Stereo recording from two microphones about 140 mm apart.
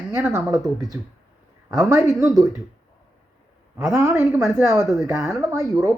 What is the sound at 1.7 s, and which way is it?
Speech, 20° right (ahead or behind).